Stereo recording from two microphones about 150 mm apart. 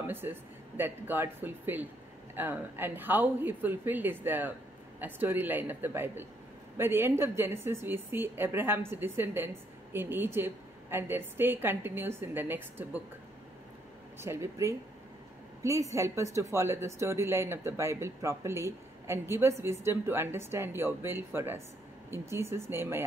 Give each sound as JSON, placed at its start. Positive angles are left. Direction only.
{"t": 0.0, "sound": "speech", "side_deg": -15}
{"t": 14.2, "sound": "speech", "side_deg": -20}